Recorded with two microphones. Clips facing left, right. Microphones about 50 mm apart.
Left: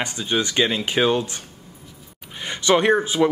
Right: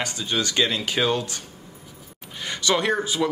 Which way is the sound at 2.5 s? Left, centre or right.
Left.